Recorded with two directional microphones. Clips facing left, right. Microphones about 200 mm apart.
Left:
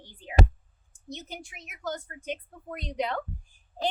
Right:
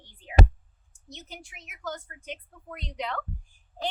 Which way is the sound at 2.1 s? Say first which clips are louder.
Left 5 dB; 40° left (ahead or behind).